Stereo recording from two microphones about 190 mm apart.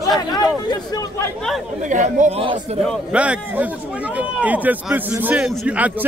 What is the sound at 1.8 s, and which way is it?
Speech, 40° right (ahead or behind).